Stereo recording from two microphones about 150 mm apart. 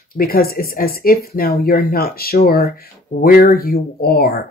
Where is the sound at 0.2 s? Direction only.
85° left.